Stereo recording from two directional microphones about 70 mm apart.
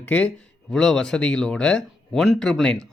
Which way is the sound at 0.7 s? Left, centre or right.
Centre.